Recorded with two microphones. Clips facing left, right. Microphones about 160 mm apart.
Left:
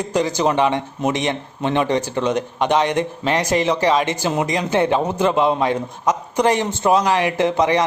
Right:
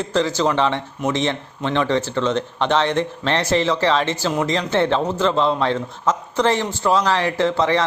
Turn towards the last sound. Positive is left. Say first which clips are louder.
# left 1 dB
turn(degrees=15)  # may be behind; listen again after turning